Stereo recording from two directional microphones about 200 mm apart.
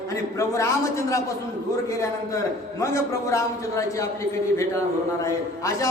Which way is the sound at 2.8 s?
15° left (ahead or behind).